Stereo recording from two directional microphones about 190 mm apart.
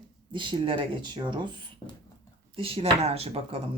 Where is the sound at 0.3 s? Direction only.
25° right (ahead or behind).